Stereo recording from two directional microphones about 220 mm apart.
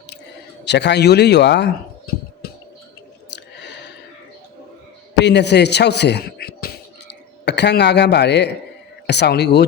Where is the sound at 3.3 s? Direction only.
50° left (ahead or behind).